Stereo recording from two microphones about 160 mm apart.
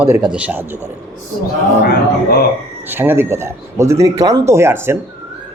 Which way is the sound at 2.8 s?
15° right (ahead or behind).